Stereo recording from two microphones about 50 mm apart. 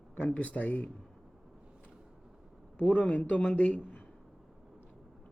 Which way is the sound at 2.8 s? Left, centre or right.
Left.